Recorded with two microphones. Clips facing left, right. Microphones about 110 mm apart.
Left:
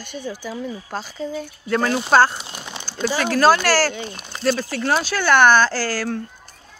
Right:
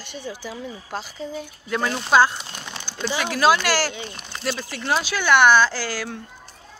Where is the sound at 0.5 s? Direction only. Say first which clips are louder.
Left 3 dB; 30° left (ahead or behind).